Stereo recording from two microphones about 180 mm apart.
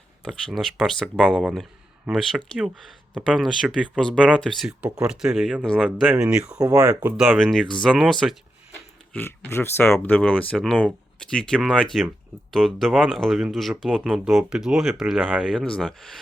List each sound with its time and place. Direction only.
0.3 s speech: centre (ahead or behind)
6.6 s speech: 20° right (ahead or behind)
7.2 s speech: centre (ahead or behind)
9.1 s speech: 15° left (ahead or behind)